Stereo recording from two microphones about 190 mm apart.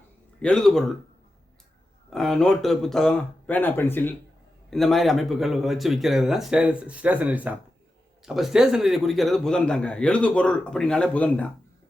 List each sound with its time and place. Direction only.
0.4 s a man's voice: 5° left (ahead or behind)
2.0 s a man's voice: centre (ahead or behind)
4.7 s a man's voice: centre (ahead or behind)